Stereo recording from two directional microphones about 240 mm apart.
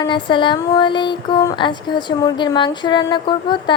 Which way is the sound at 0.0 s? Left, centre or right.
Centre.